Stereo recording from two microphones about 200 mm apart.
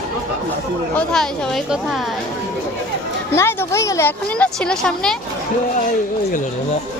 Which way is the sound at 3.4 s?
15° left (ahead or behind).